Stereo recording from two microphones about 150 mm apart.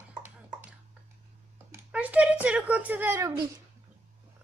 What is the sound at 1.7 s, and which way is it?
Speech, 10° right (ahead or behind).